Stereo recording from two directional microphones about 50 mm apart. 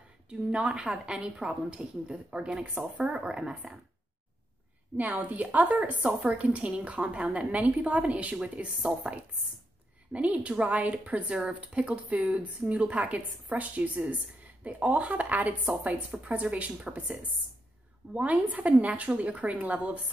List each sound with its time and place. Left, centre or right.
0.3 s speech: right
4.9 s speech: right